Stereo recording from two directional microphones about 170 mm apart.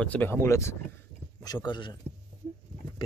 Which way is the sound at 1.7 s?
25° left (ahead or behind).